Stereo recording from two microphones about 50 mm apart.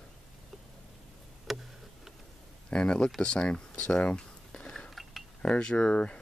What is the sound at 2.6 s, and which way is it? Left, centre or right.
Speech, centre.